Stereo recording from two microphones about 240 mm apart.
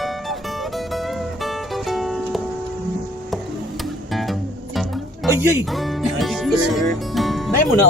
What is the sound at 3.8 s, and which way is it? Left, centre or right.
Music, centre.